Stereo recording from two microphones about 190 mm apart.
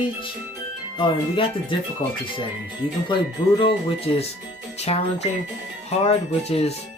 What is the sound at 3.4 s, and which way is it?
Speech, 20° left (ahead or behind).